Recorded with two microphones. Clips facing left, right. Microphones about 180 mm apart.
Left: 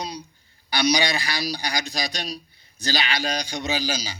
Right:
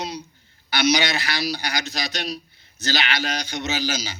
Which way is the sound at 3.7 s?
35° left (ahead or behind).